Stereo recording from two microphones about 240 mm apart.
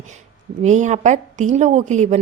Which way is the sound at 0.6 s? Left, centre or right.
Right.